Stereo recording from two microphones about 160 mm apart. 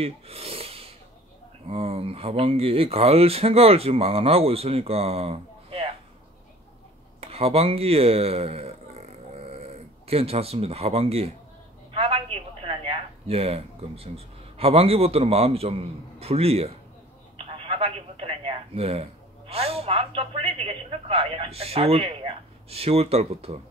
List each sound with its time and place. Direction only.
0.0 s wheeze: 40° right (ahead or behind)
1.7 s speech: 40° right (ahead or behind)
7.2 s a woman's voice: 40° right (ahead or behind)
17.5 s telephone: 35° right (ahead or behind)
20.2 s speech: 35° right (ahead or behind)